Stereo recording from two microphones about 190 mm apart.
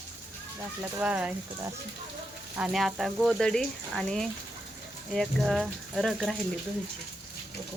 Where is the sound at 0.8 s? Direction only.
5° right (ahead or behind).